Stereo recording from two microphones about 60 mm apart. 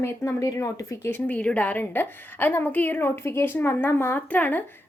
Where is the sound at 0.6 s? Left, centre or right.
Left.